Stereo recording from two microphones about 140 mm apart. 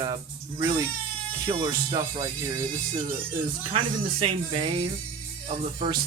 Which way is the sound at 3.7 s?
40° right (ahead or behind).